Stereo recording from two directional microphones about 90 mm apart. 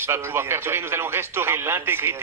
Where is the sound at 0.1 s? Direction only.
30° right (ahead or behind).